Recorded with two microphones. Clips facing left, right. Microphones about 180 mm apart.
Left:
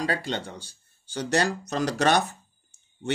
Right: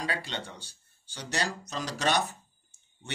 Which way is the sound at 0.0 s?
45° left (ahead or behind).